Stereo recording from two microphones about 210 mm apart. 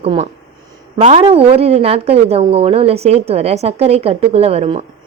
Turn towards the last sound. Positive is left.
turn(degrees=-30)  # may be behind; listen again after turning